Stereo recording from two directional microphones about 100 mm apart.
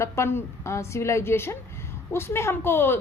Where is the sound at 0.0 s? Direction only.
25° left (ahead or behind).